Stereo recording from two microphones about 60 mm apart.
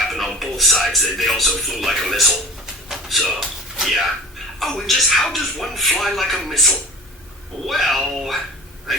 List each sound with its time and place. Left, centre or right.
0.1 s speech: centre
2.9 s a sound: centre
3.8 s speech: centre